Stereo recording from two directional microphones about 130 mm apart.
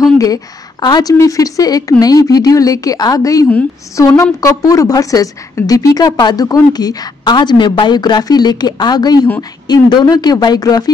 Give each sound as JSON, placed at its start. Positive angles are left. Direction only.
{"t": 0.0, "sound": "a woman's voice", "side_deg": 30}